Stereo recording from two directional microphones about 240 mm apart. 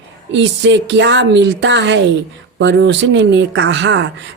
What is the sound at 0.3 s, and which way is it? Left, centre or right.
Speech, right.